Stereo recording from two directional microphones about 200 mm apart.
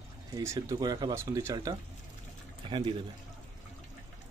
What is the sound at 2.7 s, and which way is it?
Speech, 25° right (ahead or behind).